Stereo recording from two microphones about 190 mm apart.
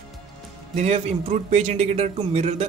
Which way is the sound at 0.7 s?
35° right (ahead or behind).